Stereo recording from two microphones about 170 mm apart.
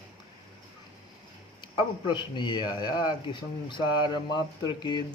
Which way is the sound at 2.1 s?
25° left (ahead or behind).